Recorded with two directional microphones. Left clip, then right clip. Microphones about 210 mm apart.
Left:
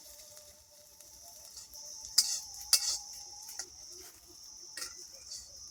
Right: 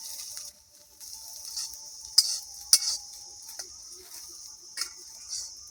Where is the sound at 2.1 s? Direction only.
5° right (ahead or behind).